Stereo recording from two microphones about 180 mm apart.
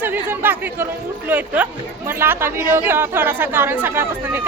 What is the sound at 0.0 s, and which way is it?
A woman's voice, 10° right (ahead or behind).